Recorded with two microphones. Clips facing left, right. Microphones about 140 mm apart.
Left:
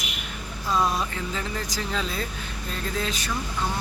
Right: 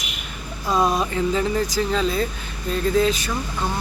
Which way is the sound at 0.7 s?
20° right (ahead or behind).